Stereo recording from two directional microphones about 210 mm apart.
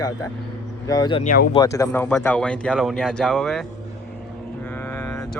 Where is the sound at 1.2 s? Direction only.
40° left (ahead or behind).